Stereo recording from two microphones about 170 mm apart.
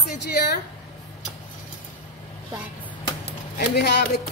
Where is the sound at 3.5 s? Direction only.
75° left (ahead or behind).